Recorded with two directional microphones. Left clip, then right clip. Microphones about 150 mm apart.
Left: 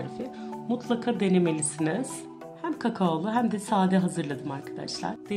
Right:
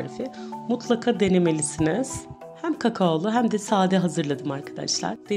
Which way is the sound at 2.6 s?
55° right (ahead or behind).